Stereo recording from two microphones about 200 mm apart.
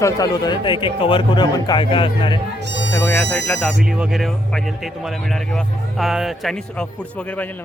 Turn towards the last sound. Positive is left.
turn(degrees=0)  # may be behind; listen again after turning